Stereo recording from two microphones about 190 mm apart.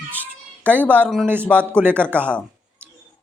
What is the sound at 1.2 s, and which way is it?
Speech, 10° right (ahead or behind).